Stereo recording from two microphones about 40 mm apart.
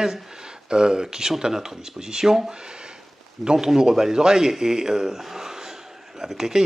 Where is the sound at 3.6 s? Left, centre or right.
Centre.